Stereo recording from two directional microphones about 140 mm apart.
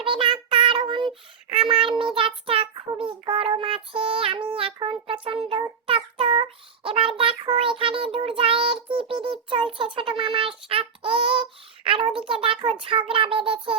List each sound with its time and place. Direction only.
0.0 s child singing: 35° right (ahead or behind)